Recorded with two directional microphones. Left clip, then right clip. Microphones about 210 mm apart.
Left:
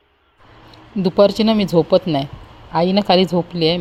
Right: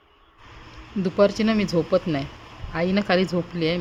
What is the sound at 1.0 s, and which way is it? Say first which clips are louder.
Speech: left 6 dB; 20° left (ahead or behind).